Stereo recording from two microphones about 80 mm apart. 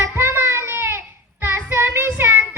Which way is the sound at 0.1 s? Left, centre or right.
Right.